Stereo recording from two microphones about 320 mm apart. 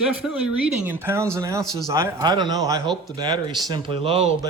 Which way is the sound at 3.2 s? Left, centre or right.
Centre.